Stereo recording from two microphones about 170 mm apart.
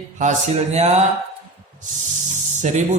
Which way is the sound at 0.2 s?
40° right (ahead or behind).